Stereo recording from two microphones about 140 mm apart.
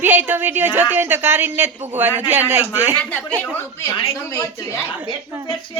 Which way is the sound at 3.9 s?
45° left (ahead or behind).